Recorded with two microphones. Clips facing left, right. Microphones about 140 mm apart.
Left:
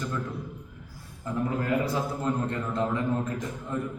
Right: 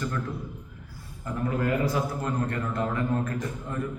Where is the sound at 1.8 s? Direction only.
20° left (ahead or behind).